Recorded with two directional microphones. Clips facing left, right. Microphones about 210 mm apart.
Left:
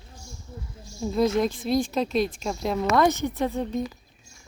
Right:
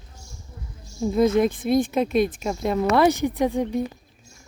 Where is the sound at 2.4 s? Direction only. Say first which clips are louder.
Right 3 dB; 5° right (ahead or behind).